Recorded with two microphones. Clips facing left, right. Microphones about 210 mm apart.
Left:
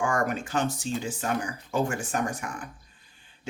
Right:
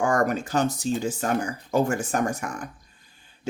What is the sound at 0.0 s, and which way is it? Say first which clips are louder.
Speech: right 4 dB; 40° right (ahead or behind).